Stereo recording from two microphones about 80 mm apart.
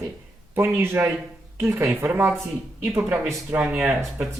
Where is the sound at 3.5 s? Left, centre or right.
Centre.